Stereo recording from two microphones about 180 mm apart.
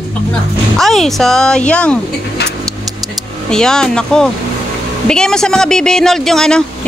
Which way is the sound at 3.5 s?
5° left (ahead or behind).